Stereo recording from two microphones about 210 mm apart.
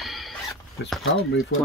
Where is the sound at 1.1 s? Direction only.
50° left (ahead or behind).